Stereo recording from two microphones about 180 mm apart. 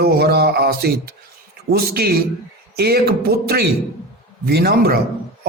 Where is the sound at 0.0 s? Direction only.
60° right (ahead or behind).